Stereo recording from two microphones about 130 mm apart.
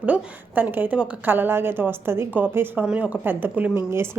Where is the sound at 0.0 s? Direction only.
10° right (ahead or behind).